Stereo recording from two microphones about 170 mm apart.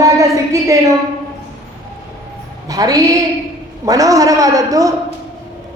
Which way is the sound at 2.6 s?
20° right (ahead or behind).